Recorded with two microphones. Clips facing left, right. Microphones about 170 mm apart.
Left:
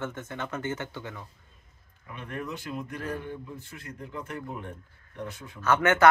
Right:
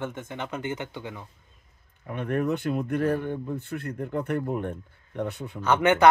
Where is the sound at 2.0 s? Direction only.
55° right (ahead or behind).